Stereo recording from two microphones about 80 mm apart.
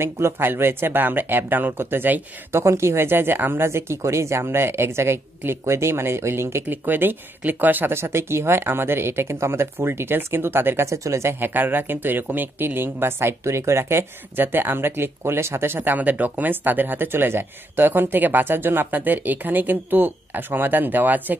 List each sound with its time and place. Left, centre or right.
0.0 s speech: right
2.6 s speech: right